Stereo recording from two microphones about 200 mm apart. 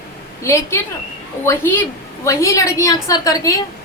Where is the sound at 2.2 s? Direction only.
15° left (ahead or behind).